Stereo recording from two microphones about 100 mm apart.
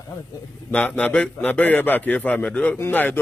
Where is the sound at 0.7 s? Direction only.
15° left (ahead or behind).